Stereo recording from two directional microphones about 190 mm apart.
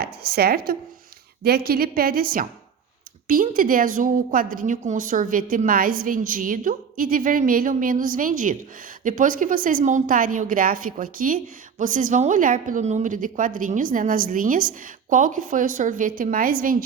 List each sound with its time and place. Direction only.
0.0 s a woman's voice: 55° right (ahead or behind)